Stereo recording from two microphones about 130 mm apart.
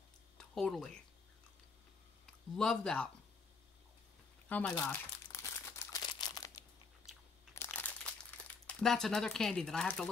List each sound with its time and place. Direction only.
0.4 s speech: 5° left (ahead or behind)
2.2 s speech: 5° left (ahead or behind)
4.5 s speech: 10° left (ahead or behind)
5.3 s crumpling: 20° left (ahead or behind)
7.1 s crunch: centre (ahead or behind)
7.5 s crumpling: 15° left (ahead or behind)